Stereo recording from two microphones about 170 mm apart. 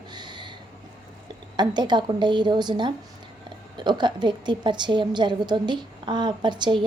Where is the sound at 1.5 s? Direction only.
25° right (ahead or behind).